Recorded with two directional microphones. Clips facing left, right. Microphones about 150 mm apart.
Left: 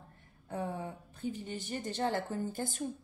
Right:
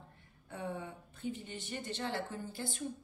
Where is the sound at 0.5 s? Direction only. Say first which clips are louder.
Left 4 dB; 40° left (ahead or behind).